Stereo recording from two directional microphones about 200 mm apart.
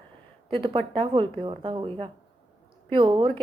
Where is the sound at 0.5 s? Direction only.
25° right (ahead or behind).